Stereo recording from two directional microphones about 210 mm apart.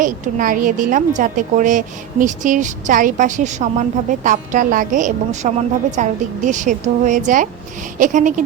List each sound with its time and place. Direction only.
0.0 s a woman's voice: 40° right (ahead or behind)